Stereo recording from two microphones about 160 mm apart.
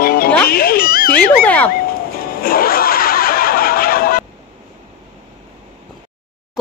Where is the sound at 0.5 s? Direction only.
70° left (ahead or behind).